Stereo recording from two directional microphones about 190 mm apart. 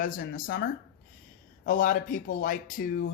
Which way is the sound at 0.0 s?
45° left (ahead or behind).